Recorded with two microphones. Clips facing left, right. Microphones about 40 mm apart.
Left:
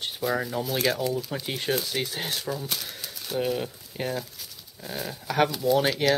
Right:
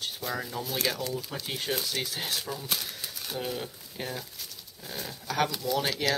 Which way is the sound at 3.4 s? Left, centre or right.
Centre.